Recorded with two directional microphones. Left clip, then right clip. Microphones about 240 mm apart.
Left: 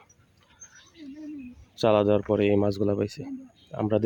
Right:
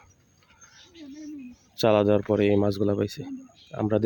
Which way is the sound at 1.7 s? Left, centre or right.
Centre.